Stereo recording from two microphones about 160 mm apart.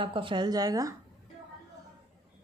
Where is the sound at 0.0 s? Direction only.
35° right (ahead or behind).